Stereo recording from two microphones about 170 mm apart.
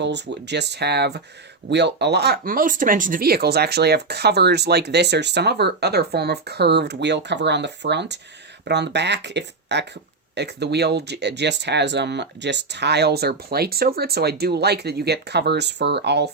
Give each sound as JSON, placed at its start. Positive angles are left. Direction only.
{"t": 0.0, "sound": "speech", "side_deg": -90}
{"t": 10.3, "sound": "speech", "side_deg": -80}